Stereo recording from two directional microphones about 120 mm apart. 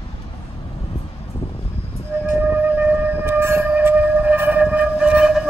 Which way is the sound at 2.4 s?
15° right (ahead or behind).